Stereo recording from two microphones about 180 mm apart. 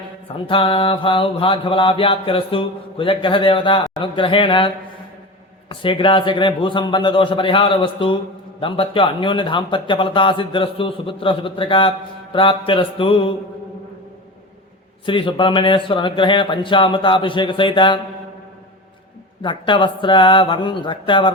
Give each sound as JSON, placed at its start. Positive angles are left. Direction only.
{"t": 0.4, "sound": "a man's voice", "side_deg": 30}
{"t": 15.0, "sound": "a man's voice", "side_deg": 30}
{"t": 19.4, "sound": "a man's voice", "side_deg": 25}